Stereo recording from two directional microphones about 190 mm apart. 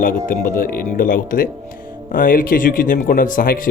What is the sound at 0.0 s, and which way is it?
Speech, 45° left (ahead or behind).